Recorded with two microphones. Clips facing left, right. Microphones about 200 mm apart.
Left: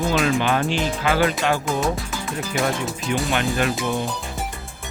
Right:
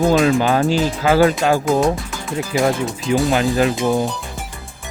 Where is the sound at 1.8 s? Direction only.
Centre (ahead or behind).